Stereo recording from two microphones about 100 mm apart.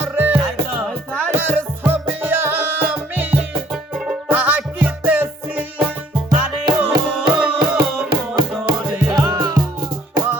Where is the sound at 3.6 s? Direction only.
5° right (ahead or behind).